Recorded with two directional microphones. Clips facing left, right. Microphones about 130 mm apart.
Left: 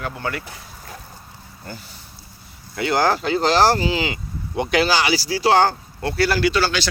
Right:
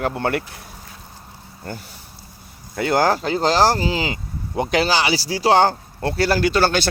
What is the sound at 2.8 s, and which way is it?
Speech, 40° right (ahead or behind).